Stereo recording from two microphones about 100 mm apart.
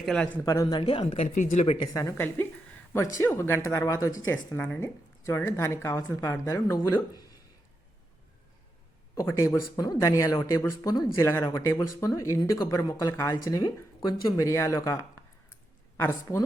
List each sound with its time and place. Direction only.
0.4 s speech: 30° left (ahead or behind)
0.7 s speech: 55° left (ahead or behind); by 1.9 s 80° left
1.9 s speech: 30° left (ahead or behind)
6.7 s speech: 40° left (ahead or behind)
9.1 s speech: 30° left (ahead or behind)
13.3 s speech: 45° left (ahead or behind); by 16.4 s 25° left (ahead or behind)